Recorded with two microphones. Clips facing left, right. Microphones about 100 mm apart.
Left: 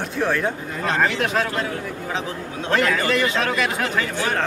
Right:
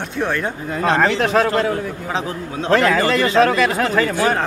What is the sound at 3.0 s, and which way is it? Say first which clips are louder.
Speech: right 6 dB; 40° right (ahead or behind).